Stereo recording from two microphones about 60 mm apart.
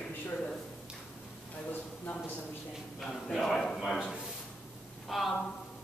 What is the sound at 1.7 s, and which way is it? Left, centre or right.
Speech, left.